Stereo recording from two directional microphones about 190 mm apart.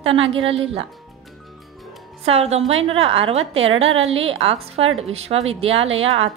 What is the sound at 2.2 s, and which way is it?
A woman's voice, 35° right (ahead or behind).